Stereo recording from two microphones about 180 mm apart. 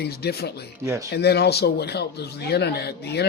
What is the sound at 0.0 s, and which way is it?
Speech, 65° left (ahead or behind).